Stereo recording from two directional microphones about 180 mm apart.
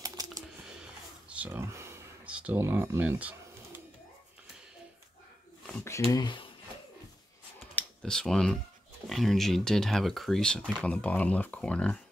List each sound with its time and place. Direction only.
0.0 s typing: 20° right (ahead or behind)
1.3 s a sound: 10° right (ahead or behind)
5.7 s speech: 15° left (ahead or behind)
6.1 s speech: 25° left (ahead or behind)
7.7 s speech: 5° left (ahead or behind)